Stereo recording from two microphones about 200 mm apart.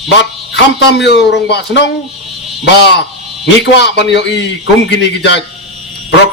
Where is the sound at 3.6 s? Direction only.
60° left (ahead or behind).